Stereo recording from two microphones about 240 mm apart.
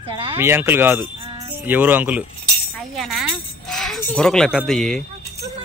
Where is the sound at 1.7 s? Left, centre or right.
Centre.